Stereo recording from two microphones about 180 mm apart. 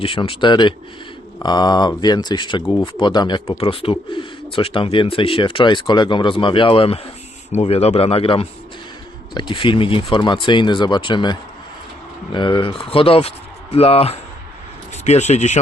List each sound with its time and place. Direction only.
0.0 s speech: 30° left (ahead or behind)